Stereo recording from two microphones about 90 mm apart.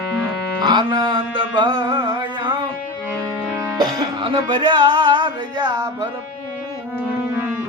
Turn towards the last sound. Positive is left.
turn(degrees=-55)  # may be behind; listen again after turning